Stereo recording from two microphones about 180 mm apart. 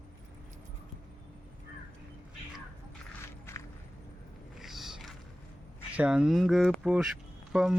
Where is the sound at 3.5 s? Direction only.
15° left (ahead or behind).